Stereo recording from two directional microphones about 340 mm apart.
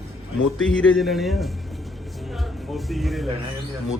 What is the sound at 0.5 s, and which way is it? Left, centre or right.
Speech, centre.